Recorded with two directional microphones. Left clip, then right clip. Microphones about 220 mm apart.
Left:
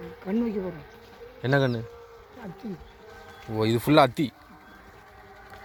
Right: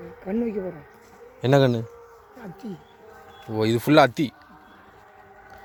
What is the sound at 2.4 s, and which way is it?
Bee, 45° right (ahead or behind).